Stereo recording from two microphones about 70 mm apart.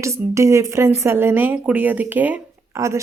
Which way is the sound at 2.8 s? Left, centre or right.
Right.